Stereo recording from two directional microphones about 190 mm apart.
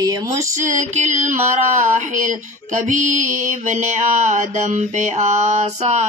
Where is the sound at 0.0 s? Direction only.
15° right (ahead or behind).